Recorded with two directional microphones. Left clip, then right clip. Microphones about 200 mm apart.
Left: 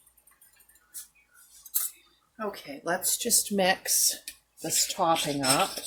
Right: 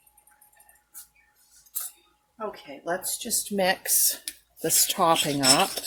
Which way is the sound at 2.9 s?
25° left (ahead or behind).